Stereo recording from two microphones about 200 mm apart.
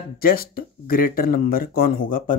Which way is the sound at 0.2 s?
45° left (ahead or behind).